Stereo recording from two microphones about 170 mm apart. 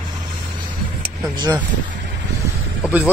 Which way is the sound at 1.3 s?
25° right (ahead or behind).